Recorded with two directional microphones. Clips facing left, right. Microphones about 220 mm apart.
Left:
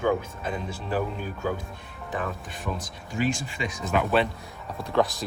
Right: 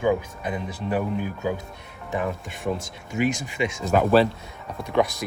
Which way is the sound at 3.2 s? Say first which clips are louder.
Right 4 dB; 20° right (ahead or behind).